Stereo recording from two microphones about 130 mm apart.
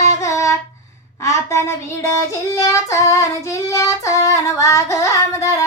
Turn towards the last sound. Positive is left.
turn(degrees=25)  # may be behind; listen again after turning